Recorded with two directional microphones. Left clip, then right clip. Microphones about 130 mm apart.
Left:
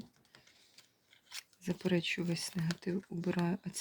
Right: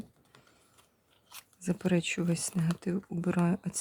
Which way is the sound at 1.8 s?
45° right (ahead or behind).